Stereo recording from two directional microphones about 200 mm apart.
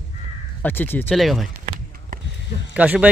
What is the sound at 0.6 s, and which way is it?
Speech, 10° left (ahead or behind).